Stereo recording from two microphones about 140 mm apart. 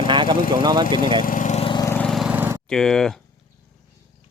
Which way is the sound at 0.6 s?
30° right (ahead or behind).